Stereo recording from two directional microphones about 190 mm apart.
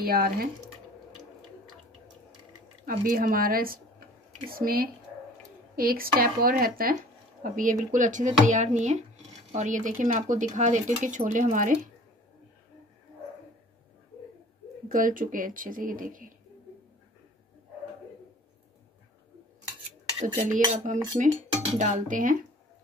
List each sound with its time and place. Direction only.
0.0 s speech: 50° right (ahead or behind)
2.8 s speech: 45° right (ahead or behind)
14.9 s speech: 45° right (ahead or behind)
20.2 s speech: 30° right (ahead or behind)